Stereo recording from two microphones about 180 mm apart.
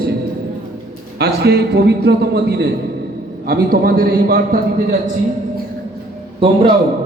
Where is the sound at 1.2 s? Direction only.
65° right (ahead or behind).